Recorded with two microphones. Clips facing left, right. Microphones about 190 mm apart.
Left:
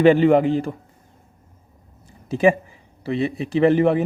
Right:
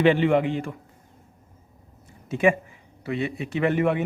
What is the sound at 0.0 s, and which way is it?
Speech, 40° left (ahead or behind).